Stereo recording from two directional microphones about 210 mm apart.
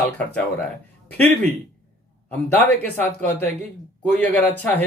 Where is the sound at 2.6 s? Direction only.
5° left (ahead or behind).